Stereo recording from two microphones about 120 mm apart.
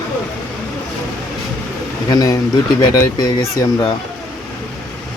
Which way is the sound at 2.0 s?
30° left (ahead or behind).